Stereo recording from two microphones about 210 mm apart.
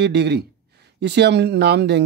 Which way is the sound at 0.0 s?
55° right (ahead or behind).